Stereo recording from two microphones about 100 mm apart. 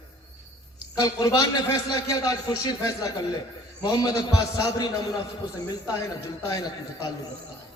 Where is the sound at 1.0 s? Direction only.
35° left (ahead or behind).